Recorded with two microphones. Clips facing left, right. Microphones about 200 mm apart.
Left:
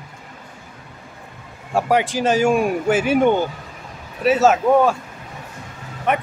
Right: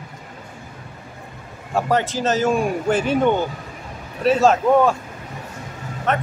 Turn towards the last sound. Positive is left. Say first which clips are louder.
# left 1 dB
turn(degrees=10)  # may be behind; listen again after turning